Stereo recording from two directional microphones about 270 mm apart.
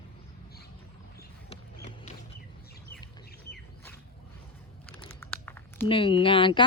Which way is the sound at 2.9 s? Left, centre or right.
Centre.